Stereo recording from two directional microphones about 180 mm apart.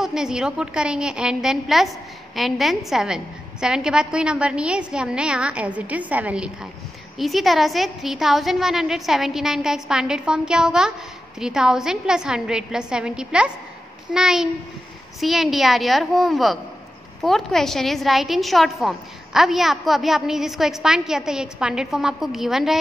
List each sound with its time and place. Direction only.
0.0 s a woman's voice: 5° right (ahead or behind)